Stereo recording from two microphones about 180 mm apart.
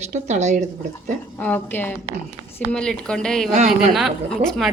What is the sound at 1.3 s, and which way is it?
A woman's voice, 10° left (ahead or behind).